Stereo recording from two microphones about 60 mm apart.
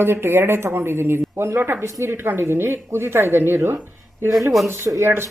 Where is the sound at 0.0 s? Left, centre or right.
Right.